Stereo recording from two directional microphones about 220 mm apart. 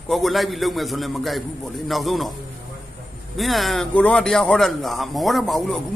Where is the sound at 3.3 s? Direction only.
Centre (ahead or behind).